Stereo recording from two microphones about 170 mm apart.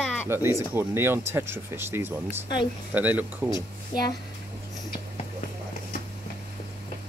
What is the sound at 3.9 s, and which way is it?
Speech, 25° left (ahead or behind).